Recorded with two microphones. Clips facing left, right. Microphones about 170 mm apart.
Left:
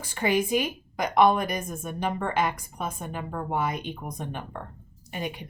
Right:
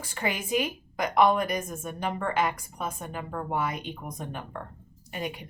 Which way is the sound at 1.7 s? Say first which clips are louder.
Left 2 dB; 15° left (ahead or behind).